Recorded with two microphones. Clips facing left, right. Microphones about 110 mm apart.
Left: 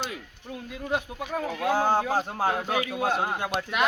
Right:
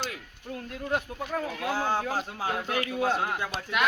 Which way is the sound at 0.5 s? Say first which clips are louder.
Left 1 dB; 10° left (ahead or behind).